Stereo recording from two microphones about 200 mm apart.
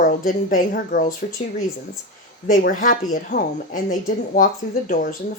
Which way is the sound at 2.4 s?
40° left (ahead or behind).